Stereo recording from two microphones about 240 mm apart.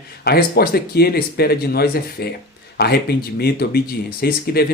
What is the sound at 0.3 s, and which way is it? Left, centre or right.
Speech, left.